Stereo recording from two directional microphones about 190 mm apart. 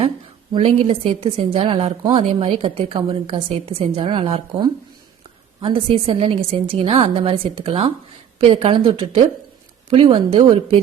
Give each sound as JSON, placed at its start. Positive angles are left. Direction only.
{"t": 0.5, "sound": "a woman's voice", "side_deg": -30}